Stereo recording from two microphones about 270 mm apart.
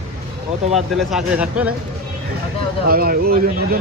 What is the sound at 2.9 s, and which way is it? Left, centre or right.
Speech, right.